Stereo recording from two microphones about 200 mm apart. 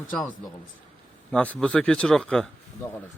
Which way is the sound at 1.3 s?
5° left (ahead or behind).